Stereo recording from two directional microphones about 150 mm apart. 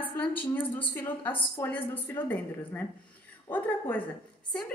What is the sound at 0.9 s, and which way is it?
A woman's voice, 15° left (ahead or behind).